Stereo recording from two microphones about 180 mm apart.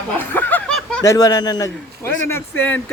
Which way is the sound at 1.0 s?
20° left (ahead or behind).